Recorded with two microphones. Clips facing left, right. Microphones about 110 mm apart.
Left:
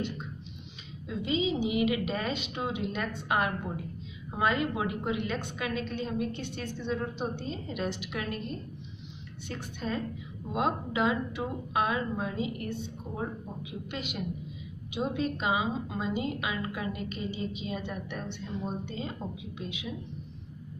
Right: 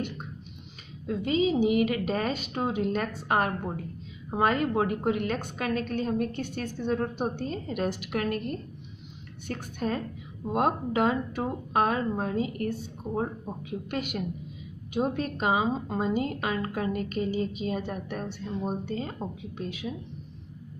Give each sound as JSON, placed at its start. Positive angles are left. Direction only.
{"t": 1.0, "sound": "a woman's voice", "side_deg": -50}